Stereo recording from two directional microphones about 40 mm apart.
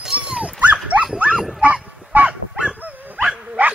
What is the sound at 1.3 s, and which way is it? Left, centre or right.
Honk, centre.